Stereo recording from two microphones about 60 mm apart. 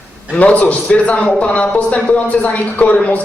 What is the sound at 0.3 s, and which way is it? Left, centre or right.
Speech, left.